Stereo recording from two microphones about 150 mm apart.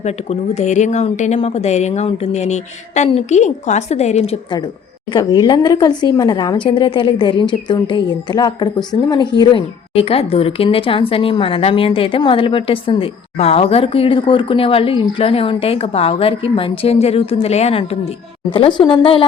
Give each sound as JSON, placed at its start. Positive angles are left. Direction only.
{"t": 0.0, "sound": "a woman's voice", "side_deg": 50}
{"t": 5.1, "sound": "speech", "side_deg": 30}
{"t": 18.5, "sound": "speech", "side_deg": 35}